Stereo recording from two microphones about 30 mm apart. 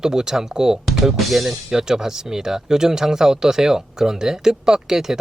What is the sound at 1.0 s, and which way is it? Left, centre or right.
Speech, centre.